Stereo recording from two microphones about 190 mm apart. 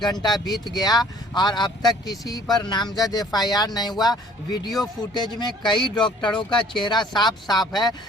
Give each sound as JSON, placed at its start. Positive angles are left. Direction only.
{"t": 0.0, "sound": "speech", "side_deg": 25}
{"t": 0.3, "sound": "speech", "side_deg": 0}
{"t": 0.8, "sound": "speech", "side_deg": 20}